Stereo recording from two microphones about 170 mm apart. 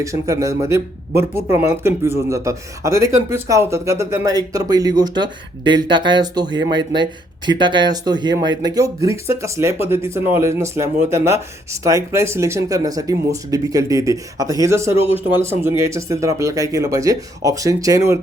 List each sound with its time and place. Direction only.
0.0 s speech: 20° right (ahead or behind)